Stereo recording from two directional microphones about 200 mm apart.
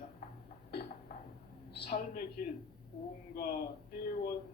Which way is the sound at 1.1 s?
45° left (ahead or behind).